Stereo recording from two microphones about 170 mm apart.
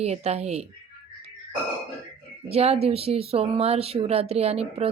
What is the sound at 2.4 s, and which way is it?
Speech, 35° right (ahead or behind).